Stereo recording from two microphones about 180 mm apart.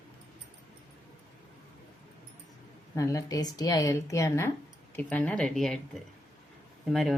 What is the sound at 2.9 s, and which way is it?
Speech, 20° left (ahead or behind).